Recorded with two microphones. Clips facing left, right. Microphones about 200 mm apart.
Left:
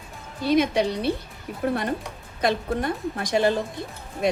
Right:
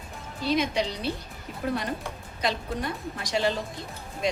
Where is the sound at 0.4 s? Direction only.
55° left (ahead or behind).